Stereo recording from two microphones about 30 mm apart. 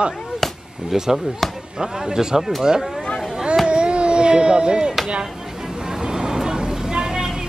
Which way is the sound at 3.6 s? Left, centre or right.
Right.